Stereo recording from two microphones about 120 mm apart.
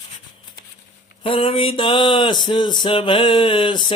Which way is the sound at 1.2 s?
50° left (ahead or behind).